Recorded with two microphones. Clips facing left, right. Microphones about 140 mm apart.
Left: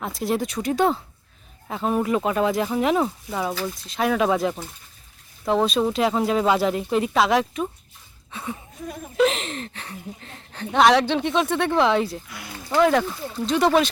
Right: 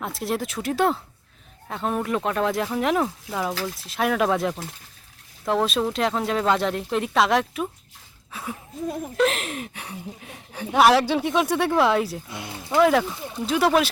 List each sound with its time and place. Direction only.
0.0 s speech: centre (ahead or behind)
12.3 s speech: 25° right (ahead or behind)
12.7 s speech: centre (ahead or behind)